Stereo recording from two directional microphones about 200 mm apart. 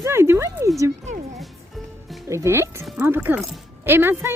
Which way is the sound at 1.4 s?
Centre (ahead or behind).